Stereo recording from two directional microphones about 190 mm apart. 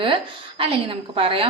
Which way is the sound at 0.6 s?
30° right (ahead or behind).